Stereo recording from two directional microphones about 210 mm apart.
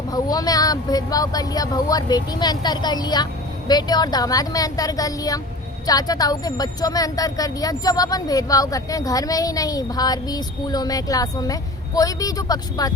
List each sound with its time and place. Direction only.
0.1 s speech: 20° left (ahead or behind)